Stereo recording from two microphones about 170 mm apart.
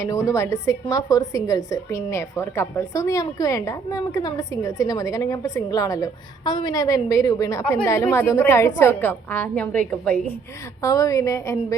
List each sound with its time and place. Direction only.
0.0 s a woman's voice: 20° left (ahead or behind)
10.8 s a woman's voice: 20° left (ahead or behind)